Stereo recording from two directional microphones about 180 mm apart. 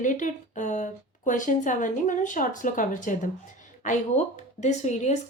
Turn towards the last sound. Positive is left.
turn(degrees=40)  # may be behind; listen again after turning